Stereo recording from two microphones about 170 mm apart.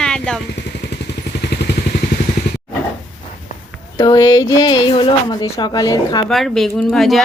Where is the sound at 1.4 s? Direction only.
70° left (ahead or behind).